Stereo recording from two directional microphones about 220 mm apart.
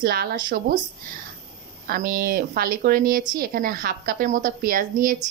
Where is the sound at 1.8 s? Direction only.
40° right (ahead or behind).